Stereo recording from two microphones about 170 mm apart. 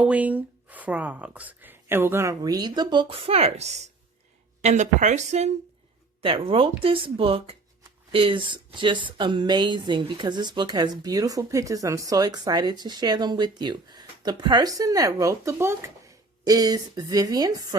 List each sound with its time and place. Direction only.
0.0 s a woman's voice: 10° right (ahead or behind)